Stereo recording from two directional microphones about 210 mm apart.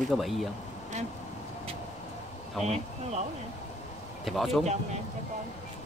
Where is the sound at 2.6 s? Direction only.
30° right (ahead or behind).